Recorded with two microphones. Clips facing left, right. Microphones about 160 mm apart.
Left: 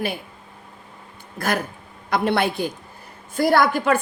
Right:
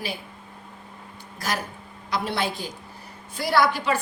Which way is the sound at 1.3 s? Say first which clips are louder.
Left 5 dB; 55° left (ahead or behind).